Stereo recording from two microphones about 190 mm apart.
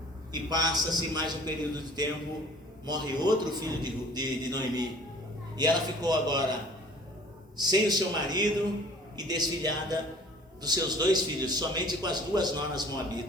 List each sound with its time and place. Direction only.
0.3 s a man's voice: 20° right (ahead or behind)